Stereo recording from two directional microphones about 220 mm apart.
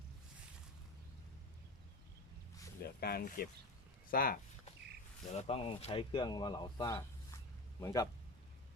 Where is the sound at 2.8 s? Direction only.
45° left (ahead or behind).